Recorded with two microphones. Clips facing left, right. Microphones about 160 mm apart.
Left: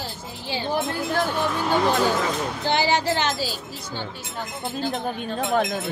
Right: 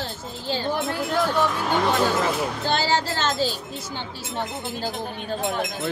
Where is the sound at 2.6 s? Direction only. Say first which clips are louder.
Left 3 dB; 15° left (ahead or behind).